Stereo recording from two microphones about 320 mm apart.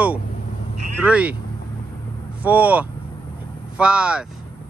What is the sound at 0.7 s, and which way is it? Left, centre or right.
Vehicle, right.